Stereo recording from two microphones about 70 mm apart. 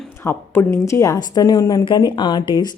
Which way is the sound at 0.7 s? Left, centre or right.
Left.